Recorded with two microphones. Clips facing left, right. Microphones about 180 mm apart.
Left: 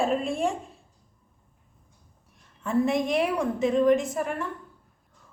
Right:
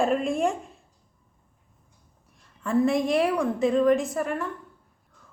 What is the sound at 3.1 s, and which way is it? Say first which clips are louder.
Speech: right 2 dB; 5° left (ahead or behind).